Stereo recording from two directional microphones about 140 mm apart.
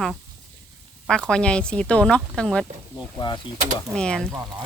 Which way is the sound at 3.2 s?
35° left (ahead or behind).